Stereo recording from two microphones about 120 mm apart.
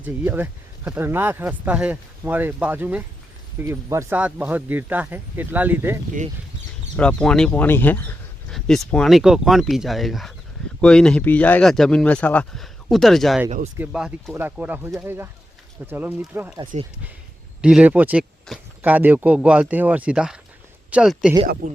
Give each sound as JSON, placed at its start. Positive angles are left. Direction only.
{"t": 0.0, "sound": "speech", "side_deg": -15}
{"t": 6.9, "sound": "speech", "side_deg": 10}
{"t": 8.4, "sound": "speech", "side_deg": 5}
{"t": 12.5, "sound": "speech", "side_deg": 0}
{"t": 13.7, "sound": "speech", "side_deg": -10}
{"t": 17.6, "sound": "speech", "side_deg": -5}